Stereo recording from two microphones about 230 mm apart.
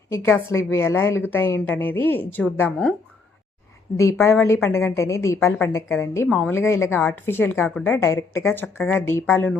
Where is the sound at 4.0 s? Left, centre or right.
Centre.